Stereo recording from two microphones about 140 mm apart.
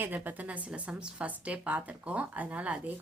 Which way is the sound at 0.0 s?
10° right (ahead or behind).